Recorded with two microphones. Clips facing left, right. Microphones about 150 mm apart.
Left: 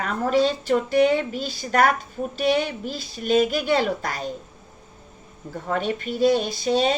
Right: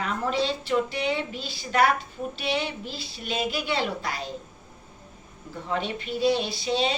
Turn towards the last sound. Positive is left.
turn(degrees=45)  # may be behind; listen again after turning